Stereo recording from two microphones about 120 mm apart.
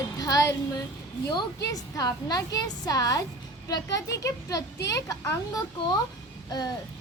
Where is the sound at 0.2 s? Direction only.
30° left (ahead or behind).